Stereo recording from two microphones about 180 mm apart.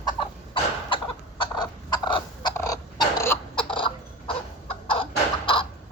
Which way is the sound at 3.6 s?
30° left (ahead or behind).